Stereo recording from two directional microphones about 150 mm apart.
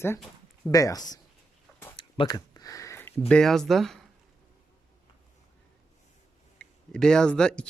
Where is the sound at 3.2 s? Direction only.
5° left (ahead or behind).